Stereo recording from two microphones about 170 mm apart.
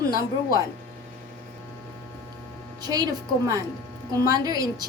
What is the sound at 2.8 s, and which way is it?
A woman's voice, 25° right (ahead or behind).